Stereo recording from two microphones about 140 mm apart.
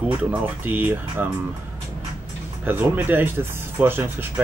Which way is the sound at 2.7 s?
15° right (ahead or behind).